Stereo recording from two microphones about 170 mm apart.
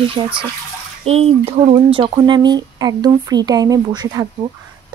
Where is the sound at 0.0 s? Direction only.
30° right (ahead or behind).